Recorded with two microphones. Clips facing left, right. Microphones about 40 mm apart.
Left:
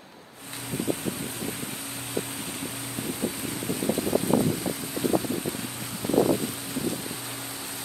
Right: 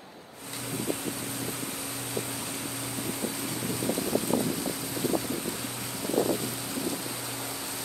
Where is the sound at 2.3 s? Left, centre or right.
Left.